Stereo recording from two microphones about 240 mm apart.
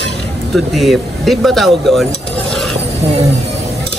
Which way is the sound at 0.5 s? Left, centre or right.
Centre.